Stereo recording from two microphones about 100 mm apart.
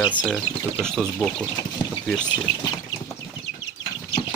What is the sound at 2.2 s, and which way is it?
Speech, 45° left (ahead or behind).